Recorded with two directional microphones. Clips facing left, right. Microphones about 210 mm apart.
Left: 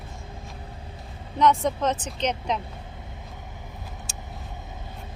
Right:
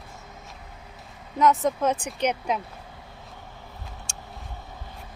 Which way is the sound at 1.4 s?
5° right (ahead or behind).